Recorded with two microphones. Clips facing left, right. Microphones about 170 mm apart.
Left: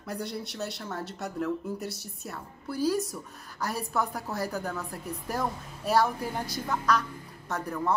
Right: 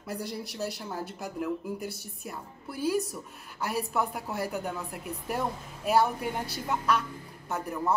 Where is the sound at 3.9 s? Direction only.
30° right (ahead or behind).